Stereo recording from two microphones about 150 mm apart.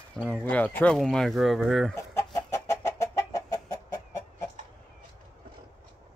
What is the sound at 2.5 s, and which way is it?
Chicken, 20° left (ahead or behind).